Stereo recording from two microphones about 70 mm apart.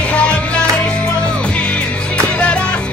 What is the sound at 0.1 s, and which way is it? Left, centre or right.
Music, centre.